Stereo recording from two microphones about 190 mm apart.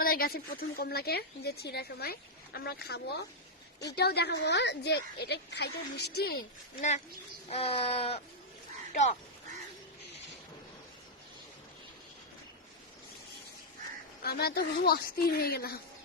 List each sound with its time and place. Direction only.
0.0 s a woman's voice: 50° left (ahead or behind)
7.5 s speech: 30° left (ahead or behind)
14.2 s speech: 55° left (ahead or behind)